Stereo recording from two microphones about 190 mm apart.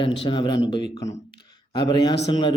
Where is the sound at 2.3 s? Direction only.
25° left (ahead or behind).